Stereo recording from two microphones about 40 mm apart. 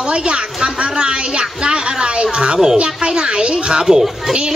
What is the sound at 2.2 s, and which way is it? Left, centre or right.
A man's voice, centre.